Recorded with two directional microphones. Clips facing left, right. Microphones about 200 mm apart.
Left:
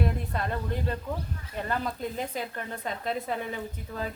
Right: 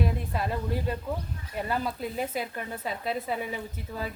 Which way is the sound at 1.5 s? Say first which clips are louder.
Right 1 dB; 10° right (ahead or behind).